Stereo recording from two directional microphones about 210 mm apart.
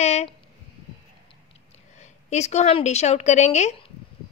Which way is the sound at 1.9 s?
35° left (ahead or behind).